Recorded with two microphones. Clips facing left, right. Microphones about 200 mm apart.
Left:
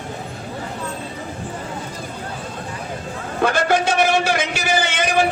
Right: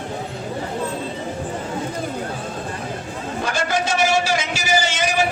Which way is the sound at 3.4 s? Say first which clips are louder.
Left 5 dB; 60° left (ahead or behind).